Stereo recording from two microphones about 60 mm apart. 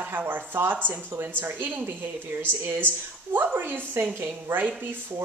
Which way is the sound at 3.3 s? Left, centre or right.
Right.